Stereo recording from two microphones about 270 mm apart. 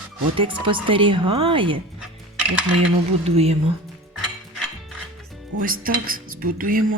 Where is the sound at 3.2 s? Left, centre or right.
Right.